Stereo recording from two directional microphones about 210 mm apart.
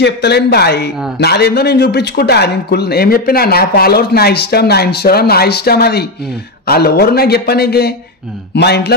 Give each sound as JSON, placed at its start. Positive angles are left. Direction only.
{"t": 0.0, "sound": "a man's voice", "side_deg": 55}